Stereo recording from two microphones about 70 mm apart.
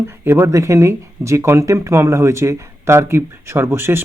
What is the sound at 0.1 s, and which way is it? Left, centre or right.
Speech, right.